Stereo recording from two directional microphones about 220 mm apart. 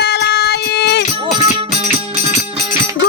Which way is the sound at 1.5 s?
25° right (ahead or behind).